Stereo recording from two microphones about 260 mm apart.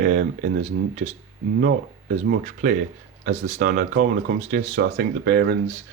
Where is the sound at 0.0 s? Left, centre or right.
Right.